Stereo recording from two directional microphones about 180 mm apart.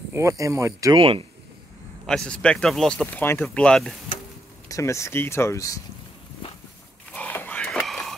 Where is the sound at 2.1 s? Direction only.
5° left (ahead or behind).